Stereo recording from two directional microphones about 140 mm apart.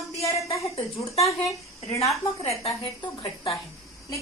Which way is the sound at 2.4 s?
45° left (ahead or behind).